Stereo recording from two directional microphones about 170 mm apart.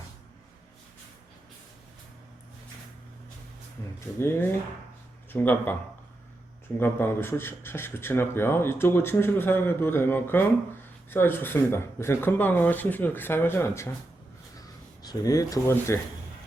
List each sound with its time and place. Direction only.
4.2 s a man's voice: 15° left (ahead or behind)
6.7 s a man's voice: 10° left (ahead or behind)
15.0 s speech: 20° left (ahead or behind)